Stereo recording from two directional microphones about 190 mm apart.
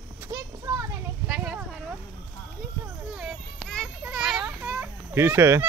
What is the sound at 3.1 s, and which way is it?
Children playing, centre (ahead or behind).